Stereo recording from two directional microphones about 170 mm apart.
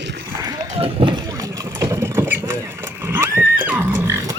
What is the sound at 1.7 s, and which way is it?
Rodents, 15° right (ahead or behind).